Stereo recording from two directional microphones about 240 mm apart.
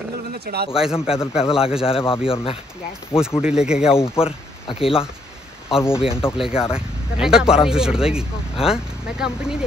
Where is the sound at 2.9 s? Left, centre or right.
Centre.